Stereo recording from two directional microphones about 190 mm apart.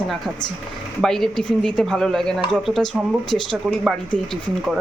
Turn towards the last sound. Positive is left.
turn(degrees=0)  # may be behind; listen again after turning